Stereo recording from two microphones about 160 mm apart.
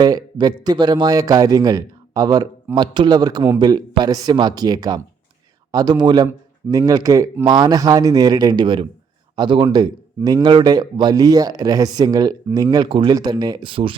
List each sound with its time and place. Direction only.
0.0 s a man's voice: 25° right (ahead or behind)